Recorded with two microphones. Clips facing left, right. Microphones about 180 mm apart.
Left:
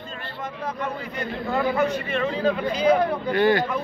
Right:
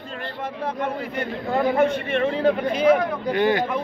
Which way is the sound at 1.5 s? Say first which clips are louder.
Right 3 dB; 40° right (ahead or behind).